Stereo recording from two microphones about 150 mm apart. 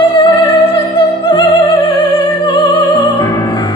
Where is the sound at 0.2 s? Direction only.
40° left (ahead or behind).